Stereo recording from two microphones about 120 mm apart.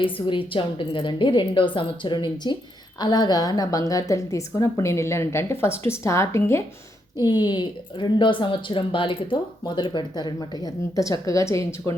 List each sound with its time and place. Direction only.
0.0 s a woman's voice: 45° left (ahead or behind); by 6.6 s 25° left (ahead or behind)
7.3 s speech: 35° left (ahead or behind)